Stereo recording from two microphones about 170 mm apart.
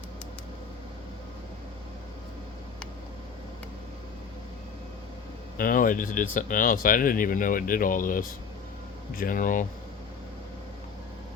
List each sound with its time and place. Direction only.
5.5 s speech: 55° left (ahead or behind)